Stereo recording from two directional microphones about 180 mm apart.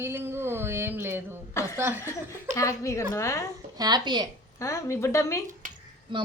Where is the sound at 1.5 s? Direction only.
15° left (ahead or behind).